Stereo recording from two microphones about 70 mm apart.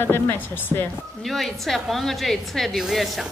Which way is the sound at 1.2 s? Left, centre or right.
Centre.